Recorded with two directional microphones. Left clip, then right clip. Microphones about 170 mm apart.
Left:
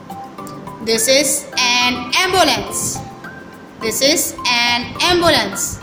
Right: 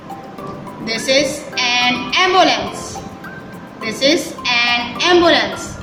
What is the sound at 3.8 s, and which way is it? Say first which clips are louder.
A woman's voice: even; 45° left (ahead or behind).